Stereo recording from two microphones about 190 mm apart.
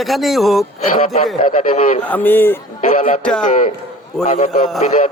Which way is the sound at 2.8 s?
45° left (ahead or behind).